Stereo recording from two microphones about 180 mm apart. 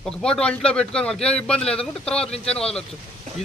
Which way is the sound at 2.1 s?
35° left (ahead or behind).